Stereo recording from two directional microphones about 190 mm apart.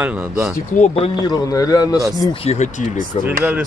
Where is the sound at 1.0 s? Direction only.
20° left (ahead or behind).